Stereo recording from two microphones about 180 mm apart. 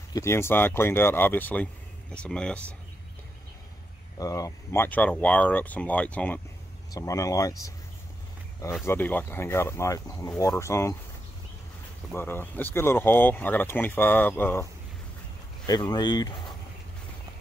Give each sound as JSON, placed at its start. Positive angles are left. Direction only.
{"t": 0.1, "sound": "speech", "side_deg": 15}
{"t": 4.2, "sound": "speech", "side_deg": 20}
{"t": 6.9, "sound": "speech", "side_deg": 20}
{"t": 8.8, "sound": "speech", "side_deg": 10}
{"t": 12.1, "sound": "speech", "side_deg": 10}
{"t": 15.6, "sound": "speech", "side_deg": 25}